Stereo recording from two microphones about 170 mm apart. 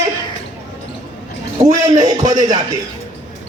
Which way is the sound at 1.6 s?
45° right (ahead or behind).